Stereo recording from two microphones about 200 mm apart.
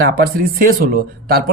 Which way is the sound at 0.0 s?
50° right (ahead or behind).